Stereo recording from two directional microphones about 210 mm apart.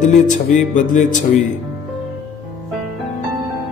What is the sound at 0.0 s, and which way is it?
Mantra, 35° left (ahead or behind).